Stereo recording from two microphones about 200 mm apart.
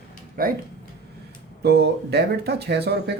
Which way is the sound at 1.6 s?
55° right (ahead or behind).